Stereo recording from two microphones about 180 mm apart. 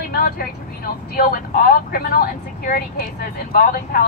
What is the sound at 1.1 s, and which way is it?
Speech, 55° left (ahead or behind).